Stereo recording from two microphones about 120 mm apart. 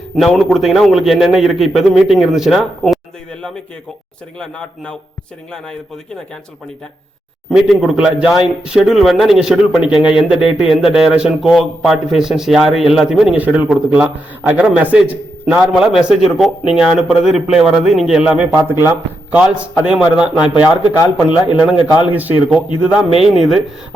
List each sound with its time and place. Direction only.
0.2 s a man's voice: centre (ahead or behind)
4.4 s speech: 5° left (ahead or behind)
7.5 s a man's voice: 5° right (ahead or behind)
18.5 s speech: 20° right (ahead or behind)
19.4 s a man's voice: 10° right (ahead or behind)
23.1 s a man's voice: 50° left (ahead or behind)
23.4 s a man's voice: centre (ahead or behind)